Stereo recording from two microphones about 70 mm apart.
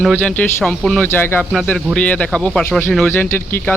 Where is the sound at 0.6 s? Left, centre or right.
Centre.